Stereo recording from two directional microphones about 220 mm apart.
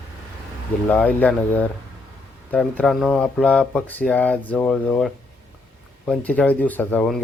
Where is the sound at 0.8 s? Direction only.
5° left (ahead or behind).